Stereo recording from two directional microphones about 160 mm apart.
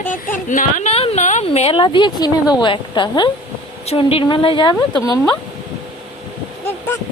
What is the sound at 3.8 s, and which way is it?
A woman's voice, 40° left (ahead or behind).